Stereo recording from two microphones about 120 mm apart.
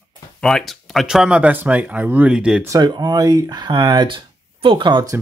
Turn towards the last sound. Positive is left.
turn(degrees=-40)  # may be behind; listen again after turning